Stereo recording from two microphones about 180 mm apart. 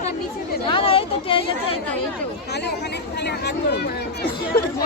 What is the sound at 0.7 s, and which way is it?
Speech, 30° left (ahead or behind).